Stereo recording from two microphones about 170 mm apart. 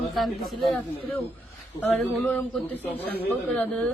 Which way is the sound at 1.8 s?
10° left (ahead or behind).